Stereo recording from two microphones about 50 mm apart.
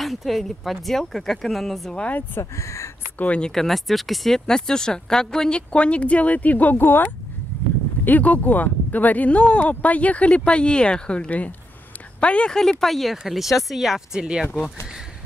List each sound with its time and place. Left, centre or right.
0.0 s speech: centre
2.0 s speech: left
2.5 s speech: left
3.2 s speech: left
3.4 s speech: centre
4.5 s speech: centre
5.7 s speech: left
6.8 s speech: left
12.5 s speech: centre